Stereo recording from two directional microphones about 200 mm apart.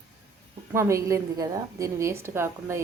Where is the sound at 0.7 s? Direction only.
15° right (ahead or behind).